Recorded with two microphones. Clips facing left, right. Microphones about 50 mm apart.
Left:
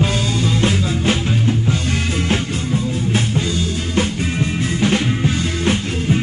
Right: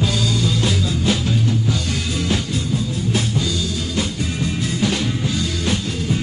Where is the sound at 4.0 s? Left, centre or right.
Left.